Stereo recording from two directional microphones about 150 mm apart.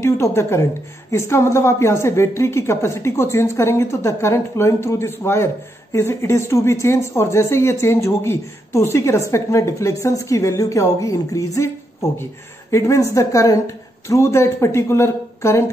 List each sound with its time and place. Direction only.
0.0 s a woman's voice: 20° left (ahead or behind)